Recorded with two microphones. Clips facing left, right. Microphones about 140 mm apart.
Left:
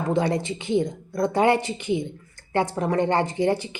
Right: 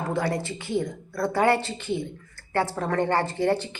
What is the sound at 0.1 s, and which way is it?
A woman's voice, 20° left (ahead or behind).